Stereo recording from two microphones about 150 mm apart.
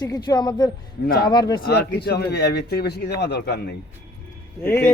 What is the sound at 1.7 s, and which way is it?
Speech, 90° left.